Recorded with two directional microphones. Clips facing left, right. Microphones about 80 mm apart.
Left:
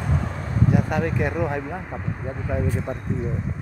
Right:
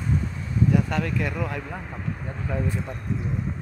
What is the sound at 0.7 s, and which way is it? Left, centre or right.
Speech, left.